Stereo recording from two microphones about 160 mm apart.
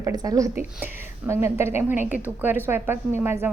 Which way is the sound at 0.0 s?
25° right (ahead or behind).